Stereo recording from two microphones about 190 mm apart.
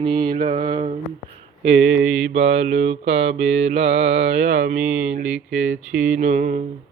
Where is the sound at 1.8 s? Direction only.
75° right (ahead or behind).